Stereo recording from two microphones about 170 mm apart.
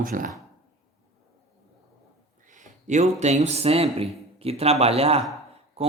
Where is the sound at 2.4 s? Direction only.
50° right (ahead or behind).